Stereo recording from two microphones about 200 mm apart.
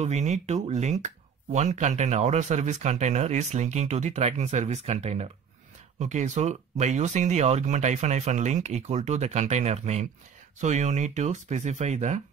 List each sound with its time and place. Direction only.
0.0 s speech: 35° right (ahead or behind)